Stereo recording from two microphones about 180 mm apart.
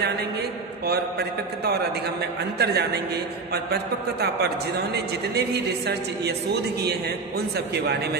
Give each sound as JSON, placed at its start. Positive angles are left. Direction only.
{"t": 2.6, "sound": "a woman's voice", "side_deg": -65}
{"t": 4.2, "sound": "a woman's voice", "side_deg": -65}